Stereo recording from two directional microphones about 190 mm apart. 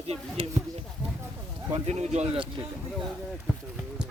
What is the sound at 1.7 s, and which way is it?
Speech, 35° right (ahead or behind).